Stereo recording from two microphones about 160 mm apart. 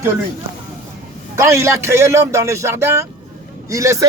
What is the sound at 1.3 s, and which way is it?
A man's voice, 15° right (ahead or behind).